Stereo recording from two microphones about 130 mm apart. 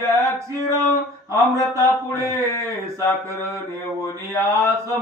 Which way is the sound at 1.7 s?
25° right (ahead or behind).